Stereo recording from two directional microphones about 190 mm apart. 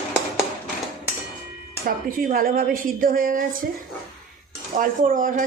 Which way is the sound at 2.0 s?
50° right (ahead or behind).